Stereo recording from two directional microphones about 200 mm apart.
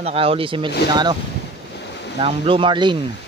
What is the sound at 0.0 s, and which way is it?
Speech, 30° right (ahead or behind).